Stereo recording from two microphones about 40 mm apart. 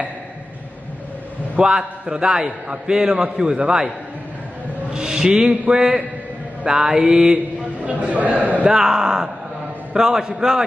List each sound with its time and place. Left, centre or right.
1.6 s a man's voice: centre
4.9 s a man's voice: centre
7.8 s a man's voice: right
8.6 s speech: centre